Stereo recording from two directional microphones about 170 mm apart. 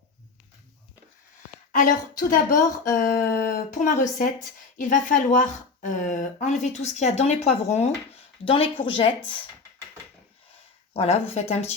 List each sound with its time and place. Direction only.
1.8 s a woman's voice: 55° left (ahead or behind); by 9.3 s 30° left (ahead or behind)
10.9 s speech: 40° left (ahead or behind)